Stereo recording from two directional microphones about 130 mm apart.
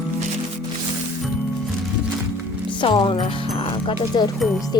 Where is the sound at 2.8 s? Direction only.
40° left (ahead or behind).